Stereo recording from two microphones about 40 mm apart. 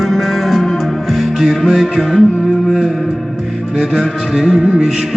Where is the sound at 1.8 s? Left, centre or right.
Centre.